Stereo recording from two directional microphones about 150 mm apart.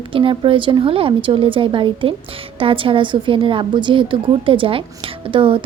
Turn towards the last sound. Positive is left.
turn(degrees=-35)  # may be behind; listen again after turning